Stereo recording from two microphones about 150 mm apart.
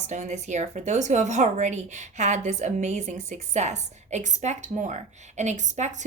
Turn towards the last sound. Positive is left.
turn(degrees=-50)  # may be behind; listen again after turning